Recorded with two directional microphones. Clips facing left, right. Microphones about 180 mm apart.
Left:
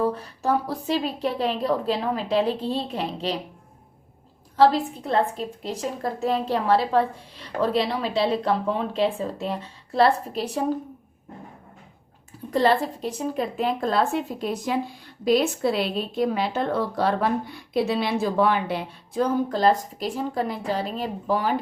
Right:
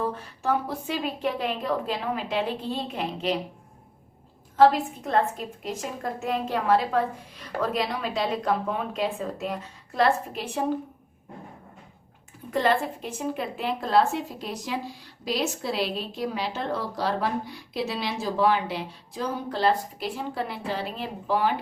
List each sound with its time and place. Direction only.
0.0 s a woman's voice: 35° left (ahead or behind)
4.5 s a woman's voice: 35° left (ahead or behind)
12.5 s a woman's voice: 35° left (ahead or behind)